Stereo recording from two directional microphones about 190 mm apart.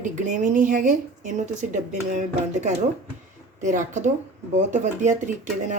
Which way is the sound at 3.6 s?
40° right (ahead or behind).